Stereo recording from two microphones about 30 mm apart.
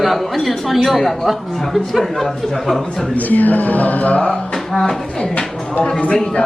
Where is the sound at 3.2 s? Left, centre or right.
Left.